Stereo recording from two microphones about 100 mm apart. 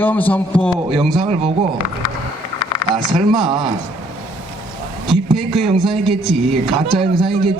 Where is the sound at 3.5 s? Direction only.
50° right (ahead or behind).